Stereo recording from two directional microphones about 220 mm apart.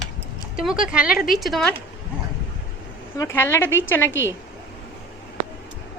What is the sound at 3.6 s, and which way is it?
Speech, 60° left (ahead or behind).